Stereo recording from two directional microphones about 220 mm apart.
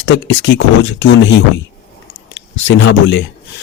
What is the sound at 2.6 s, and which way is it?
Speech, 55° left (ahead or behind).